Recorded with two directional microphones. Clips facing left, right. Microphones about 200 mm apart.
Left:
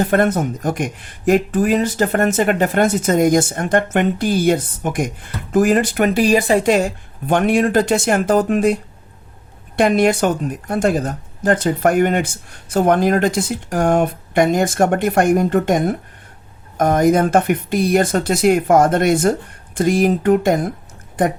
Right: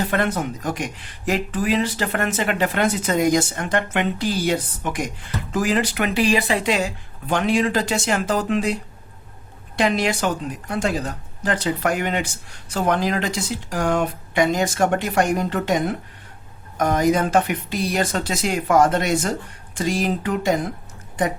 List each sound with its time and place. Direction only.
0.0 s speech: 45° left (ahead or behind)